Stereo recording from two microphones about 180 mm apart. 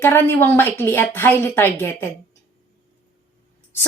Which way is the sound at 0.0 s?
10° left (ahead or behind).